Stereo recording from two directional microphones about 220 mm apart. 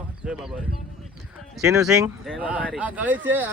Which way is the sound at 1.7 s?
15° right (ahead or behind).